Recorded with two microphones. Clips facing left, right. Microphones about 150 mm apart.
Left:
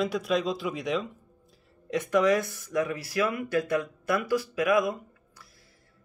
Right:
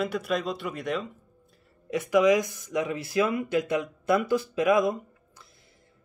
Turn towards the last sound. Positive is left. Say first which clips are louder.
# right 2 dB
turn(degrees=-25)  # may be behind; listen again after turning